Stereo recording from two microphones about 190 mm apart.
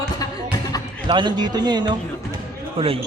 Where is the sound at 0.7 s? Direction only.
20° left (ahead or behind).